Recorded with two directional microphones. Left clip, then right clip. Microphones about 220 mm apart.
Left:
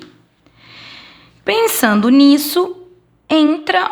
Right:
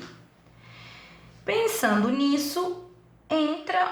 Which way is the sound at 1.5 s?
45° left (ahead or behind).